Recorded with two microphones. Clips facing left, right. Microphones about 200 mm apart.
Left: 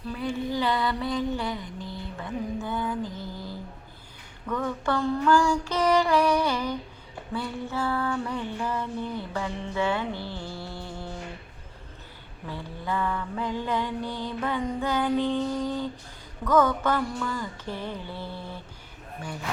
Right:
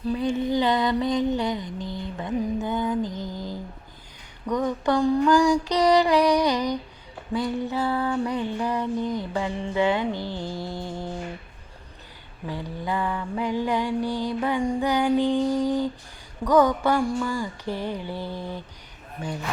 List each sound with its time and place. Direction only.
0.1 s a sound: 20° right (ahead or behind)
1.9 s mantra: 20° right (ahead or behind)
4.4 s music: 15° right (ahead or behind)
12.5 s music: 15° right (ahead or behind)